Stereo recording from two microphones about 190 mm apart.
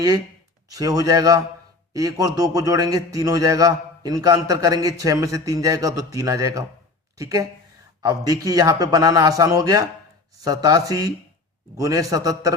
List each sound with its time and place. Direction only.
0.7 s a man's voice: 20° right (ahead or behind)